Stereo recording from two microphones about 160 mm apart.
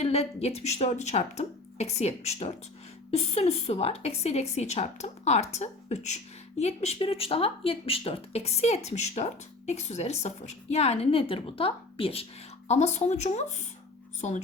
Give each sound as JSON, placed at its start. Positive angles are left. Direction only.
{"t": 0.0, "sound": "a woman's voice", "side_deg": 40}